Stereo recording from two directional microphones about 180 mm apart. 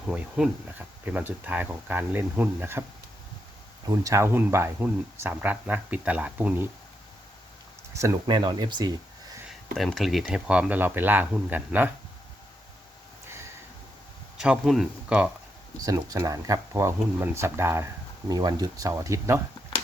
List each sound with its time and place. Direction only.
0.1 s speech: 5° right (ahead or behind)
3.8 s speech: 15° right (ahead or behind)
7.9 s speech: 20° right (ahead or behind)
9.7 s speech: centre (ahead or behind)
14.3 s speech: 5° right (ahead or behind)
15.8 s speech: 20° right (ahead or behind)